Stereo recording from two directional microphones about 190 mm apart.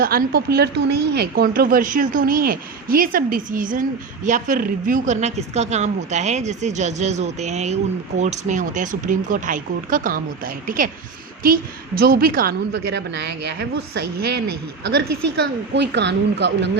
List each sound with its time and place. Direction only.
0.0 s speech: 50° right (ahead or behind)
12.7 s speech: 65° right (ahead or behind)
15.7 s speech: 65° right (ahead or behind)